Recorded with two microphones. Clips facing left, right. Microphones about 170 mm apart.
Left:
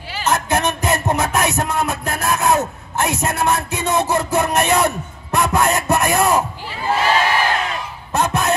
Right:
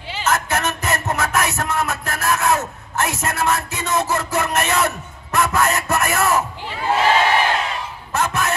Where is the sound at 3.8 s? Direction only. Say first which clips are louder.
Left 3 dB; 30° left (ahead or behind).